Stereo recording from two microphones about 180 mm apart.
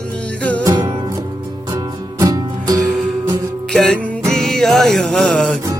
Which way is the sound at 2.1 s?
20° right (ahead or behind).